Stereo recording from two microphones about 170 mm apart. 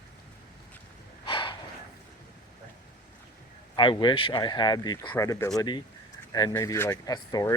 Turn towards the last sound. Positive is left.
turn(degrees=20)  # may be behind; listen again after turning